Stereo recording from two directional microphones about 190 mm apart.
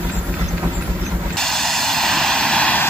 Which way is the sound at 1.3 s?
Centre (ahead or behind).